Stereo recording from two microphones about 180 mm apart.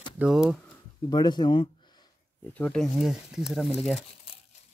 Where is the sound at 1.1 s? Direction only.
25° left (ahead or behind).